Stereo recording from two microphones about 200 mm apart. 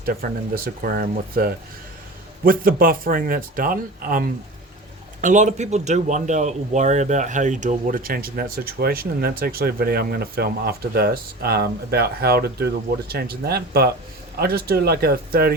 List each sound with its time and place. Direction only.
0.0 s speech: 45° right (ahead or behind)